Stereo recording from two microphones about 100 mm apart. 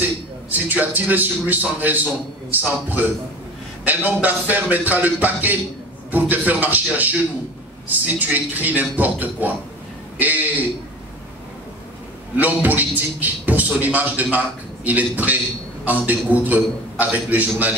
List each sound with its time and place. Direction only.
0.0 s a man's voice: 15° right (ahead or behind)
12.4 s a man's voice: 15° right (ahead or behind)